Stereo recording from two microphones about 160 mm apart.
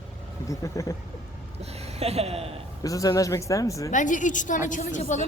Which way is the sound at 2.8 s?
20° left (ahead or behind).